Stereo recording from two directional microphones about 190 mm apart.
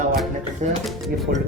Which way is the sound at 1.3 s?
50° right (ahead or behind).